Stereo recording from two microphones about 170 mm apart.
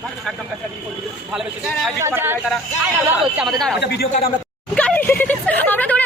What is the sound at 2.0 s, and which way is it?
Speech, 15° right (ahead or behind).